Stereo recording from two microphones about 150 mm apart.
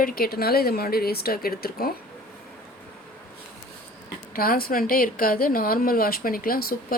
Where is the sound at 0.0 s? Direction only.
75° left (ahead or behind).